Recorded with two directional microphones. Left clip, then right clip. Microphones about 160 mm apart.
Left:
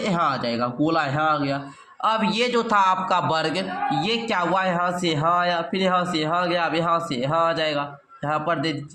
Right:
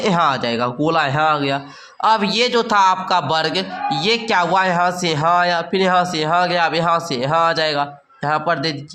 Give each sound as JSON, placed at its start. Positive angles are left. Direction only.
{"t": 0.0, "sound": "a man's voice", "side_deg": -40}
{"t": 2.0, "sound": "a man's voice", "side_deg": -30}